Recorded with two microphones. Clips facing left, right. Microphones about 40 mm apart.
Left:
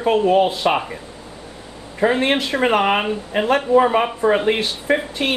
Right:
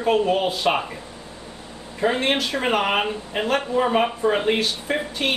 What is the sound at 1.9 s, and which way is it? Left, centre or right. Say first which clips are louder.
Speech: left 4 dB; centre.